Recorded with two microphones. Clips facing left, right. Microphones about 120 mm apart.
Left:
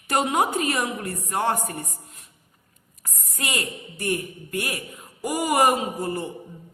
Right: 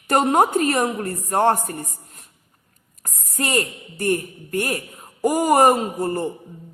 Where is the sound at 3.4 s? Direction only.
45° right (ahead or behind).